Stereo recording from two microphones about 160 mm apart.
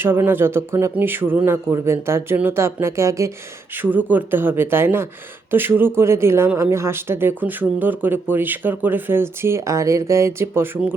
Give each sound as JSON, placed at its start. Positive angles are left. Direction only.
{"t": 0.0, "sound": "speech", "side_deg": -15}